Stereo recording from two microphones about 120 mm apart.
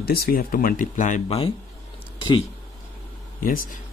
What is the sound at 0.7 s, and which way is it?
Speech, 90° left.